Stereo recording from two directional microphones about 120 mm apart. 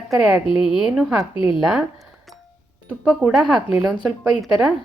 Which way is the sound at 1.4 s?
45° left (ahead or behind).